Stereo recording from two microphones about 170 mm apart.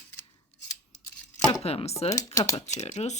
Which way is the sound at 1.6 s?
35° left (ahead or behind).